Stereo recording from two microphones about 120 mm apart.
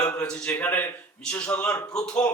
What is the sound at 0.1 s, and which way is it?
A man's voice, 10° left (ahead or behind).